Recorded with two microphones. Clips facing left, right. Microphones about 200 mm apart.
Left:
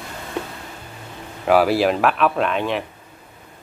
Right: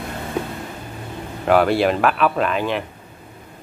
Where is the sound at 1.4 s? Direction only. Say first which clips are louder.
Even; centre (ahead or behind).